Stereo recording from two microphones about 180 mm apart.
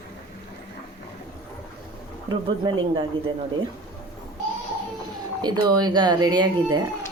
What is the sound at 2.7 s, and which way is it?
Speech, 25° right (ahead or behind).